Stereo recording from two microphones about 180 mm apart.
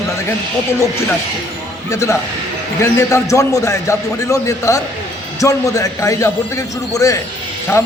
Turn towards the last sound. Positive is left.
turn(degrees=15)  # may be behind; listen again after turning